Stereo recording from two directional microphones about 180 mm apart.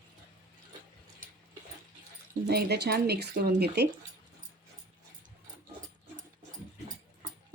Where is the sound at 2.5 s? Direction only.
65° right (ahead or behind).